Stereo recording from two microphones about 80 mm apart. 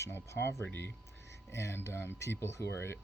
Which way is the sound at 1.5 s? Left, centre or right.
Left.